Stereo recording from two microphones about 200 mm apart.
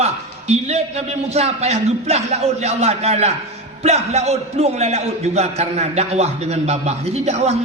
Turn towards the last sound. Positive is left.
turn(degrees=-30)  # may be behind; listen again after turning